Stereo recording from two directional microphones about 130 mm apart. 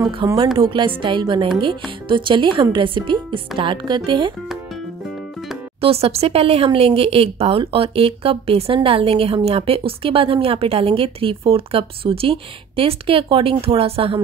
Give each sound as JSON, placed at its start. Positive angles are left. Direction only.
{"t": 0.2, "sound": "speech", "side_deg": -35}
{"t": 5.8, "sound": "speech", "side_deg": -50}